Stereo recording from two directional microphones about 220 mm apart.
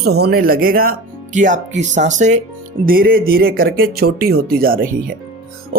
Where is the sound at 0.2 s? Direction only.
45° right (ahead or behind).